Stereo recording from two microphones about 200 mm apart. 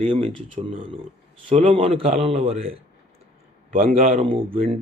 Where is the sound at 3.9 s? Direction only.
30° right (ahead or behind).